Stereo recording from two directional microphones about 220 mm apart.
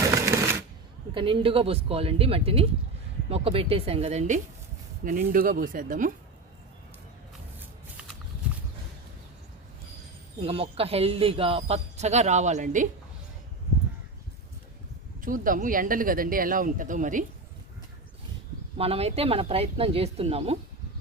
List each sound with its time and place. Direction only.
0.1 s machine gun: 15° right (ahead or behind)
1.1 s speech: 25° right (ahead or behind)
10.4 s speech: 25° right (ahead or behind)
15.2 s speech: 40° right (ahead or behind)
18.8 s speech: 25° right (ahead or behind)